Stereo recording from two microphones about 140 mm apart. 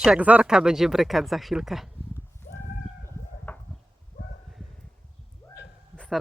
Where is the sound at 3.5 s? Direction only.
15° left (ahead or behind).